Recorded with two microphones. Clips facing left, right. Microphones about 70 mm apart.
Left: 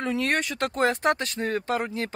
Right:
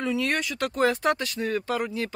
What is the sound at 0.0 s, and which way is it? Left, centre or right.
Speech, left.